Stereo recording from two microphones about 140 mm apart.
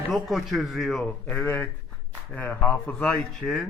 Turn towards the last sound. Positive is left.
turn(degrees=0)  # may be behind; listen again after turning